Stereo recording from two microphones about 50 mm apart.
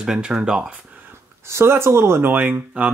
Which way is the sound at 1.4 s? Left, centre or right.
Right.